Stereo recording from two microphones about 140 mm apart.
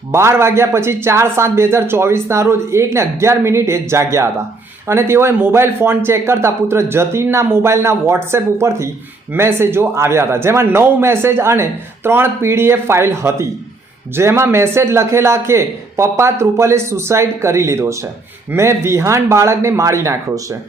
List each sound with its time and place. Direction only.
0.1 s a man's voice: 20° right (ahead or behind)